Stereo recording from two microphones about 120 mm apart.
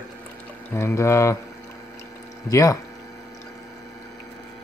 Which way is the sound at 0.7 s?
25° left (ahead or behind).